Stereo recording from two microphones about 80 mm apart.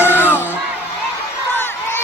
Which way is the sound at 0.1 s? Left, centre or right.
Left.